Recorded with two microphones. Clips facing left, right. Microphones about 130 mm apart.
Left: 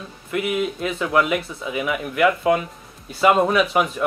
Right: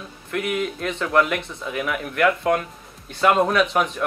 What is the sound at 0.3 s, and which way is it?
Speech, 5° left (ahead or behind).